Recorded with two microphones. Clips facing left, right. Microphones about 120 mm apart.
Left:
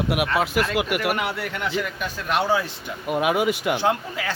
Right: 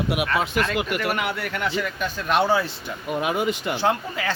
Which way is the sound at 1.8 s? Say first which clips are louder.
Right 1 dB; 5° left (ahead or behind).